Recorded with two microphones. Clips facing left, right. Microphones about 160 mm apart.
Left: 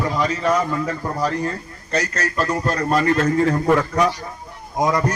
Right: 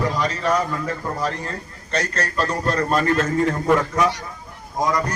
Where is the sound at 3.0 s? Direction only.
30° left (ahead or behind).